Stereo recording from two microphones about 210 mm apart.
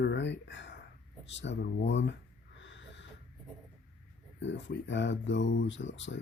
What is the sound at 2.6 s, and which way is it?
Snort, 60° left (ahead or behind).